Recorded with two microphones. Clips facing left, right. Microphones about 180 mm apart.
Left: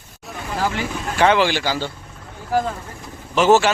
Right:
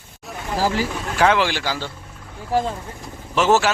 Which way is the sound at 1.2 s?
Centre (ahead or behind).